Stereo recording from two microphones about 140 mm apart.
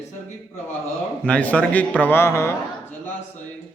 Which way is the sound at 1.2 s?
10° left (ahead or behind).